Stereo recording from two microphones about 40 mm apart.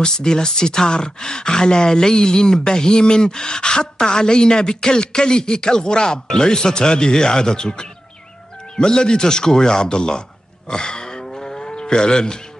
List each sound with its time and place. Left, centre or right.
0.0 s speech: centre
10.7 s cattle: centre